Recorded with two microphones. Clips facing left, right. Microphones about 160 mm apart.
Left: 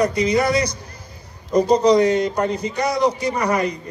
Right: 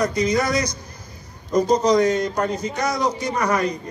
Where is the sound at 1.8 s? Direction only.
30° left (ahead or behind).